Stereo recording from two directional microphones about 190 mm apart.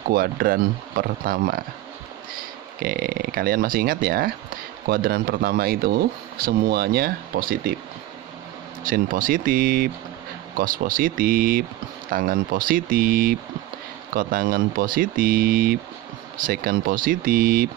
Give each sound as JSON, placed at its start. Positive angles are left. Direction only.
{"t": 0.1, "sound": "speech", "side_deg": -50}
{"t": 2.8, "sound": "speech", "side_deg": -50}
{"t": 8.8, "sound": "speech", "side_deg": -45}